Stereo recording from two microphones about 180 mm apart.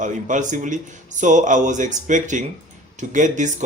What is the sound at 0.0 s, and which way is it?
A man's voice, 45° right (ahead or behind).